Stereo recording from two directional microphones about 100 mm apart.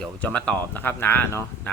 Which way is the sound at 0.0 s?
10° left (ahead or behind).